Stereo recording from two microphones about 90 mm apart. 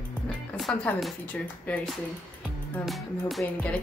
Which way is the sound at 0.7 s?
10° left (ahead or behind).